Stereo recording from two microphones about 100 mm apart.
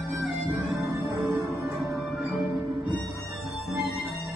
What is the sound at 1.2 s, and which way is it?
Music, 20° right (ahead or behind).